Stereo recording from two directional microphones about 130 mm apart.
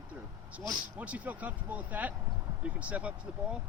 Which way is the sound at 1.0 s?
10° right (ahead or behind).